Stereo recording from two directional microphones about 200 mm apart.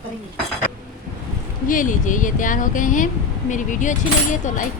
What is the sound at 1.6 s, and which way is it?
Speech, 40° left (ahead or behind).